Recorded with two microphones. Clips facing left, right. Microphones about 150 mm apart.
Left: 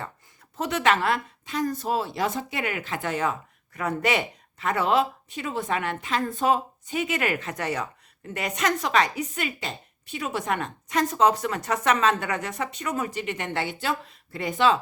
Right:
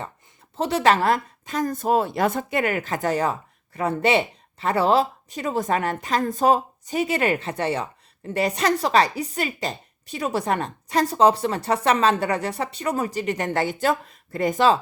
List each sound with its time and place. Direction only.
0.5 s speech: 30° right (ahead or behind)